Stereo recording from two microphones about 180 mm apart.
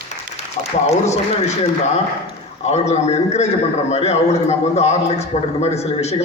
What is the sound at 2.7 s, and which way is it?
A man's voice, 40° left (ahead or behind).